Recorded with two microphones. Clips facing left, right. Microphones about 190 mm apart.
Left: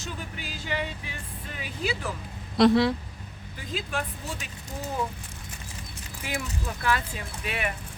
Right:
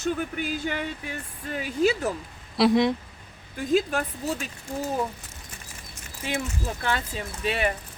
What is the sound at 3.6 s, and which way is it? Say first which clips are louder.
Speech: right 9 dB; 45° right (ahead or behind).